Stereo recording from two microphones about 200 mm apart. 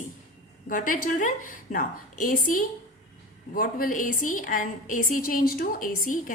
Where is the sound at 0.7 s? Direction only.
40° left (ahead or behind).